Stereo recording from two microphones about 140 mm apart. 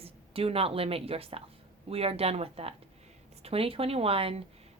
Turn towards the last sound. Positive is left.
turn(degrees=-45)  # may be behind; listen again after turning